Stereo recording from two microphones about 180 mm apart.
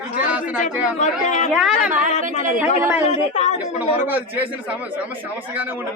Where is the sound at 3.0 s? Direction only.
40° left (ahead or behind).